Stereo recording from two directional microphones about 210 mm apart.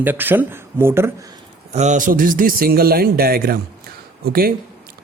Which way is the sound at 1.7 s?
35° right (ahead or behind).